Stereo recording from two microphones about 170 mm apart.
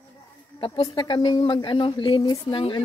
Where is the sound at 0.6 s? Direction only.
30° left (ahead or behind).